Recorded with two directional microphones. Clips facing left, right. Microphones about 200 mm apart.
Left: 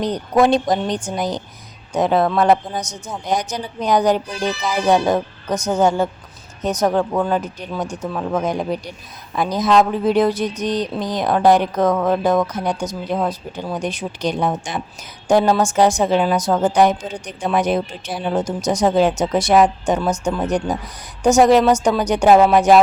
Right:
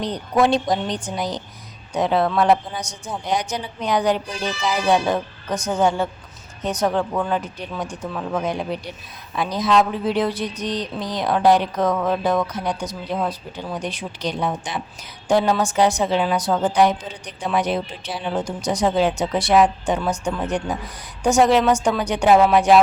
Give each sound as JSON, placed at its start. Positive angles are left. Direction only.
{"t": 0.0, "sound": "speech", "side_deg": 45}